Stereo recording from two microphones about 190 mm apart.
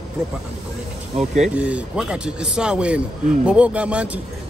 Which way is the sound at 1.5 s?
5° right (ahead or behind).